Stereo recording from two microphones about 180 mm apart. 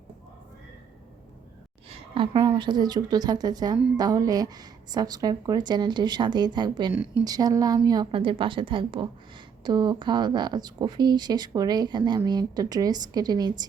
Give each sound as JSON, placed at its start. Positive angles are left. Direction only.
{"t": 1.9, "sound": "speech", "side_deg": -30}